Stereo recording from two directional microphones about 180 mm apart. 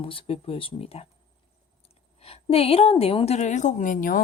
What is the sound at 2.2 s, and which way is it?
A woman's voice, 35° left (ahead or behind).